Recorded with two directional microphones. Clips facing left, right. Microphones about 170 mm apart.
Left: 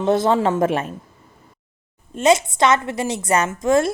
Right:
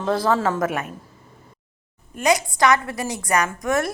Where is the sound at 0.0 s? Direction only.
25° left (ahead or behind).